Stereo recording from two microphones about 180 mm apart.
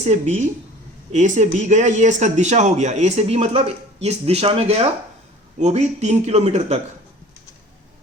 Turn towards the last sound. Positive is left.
turn(degrees=-40)  # may be behind; listen again after turning